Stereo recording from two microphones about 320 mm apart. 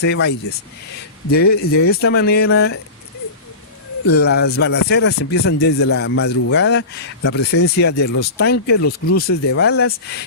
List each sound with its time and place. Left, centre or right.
0.0 s a man's voice: left
4.1 s a man's voice: left
8.1 s speech: left
8.4 s a man's voice: left
8.8 s speech: left
9.1 s a man's voice: left